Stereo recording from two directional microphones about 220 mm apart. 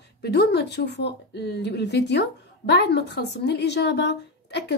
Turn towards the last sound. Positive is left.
turn(degrees=50)  # may be behind; listen again after turning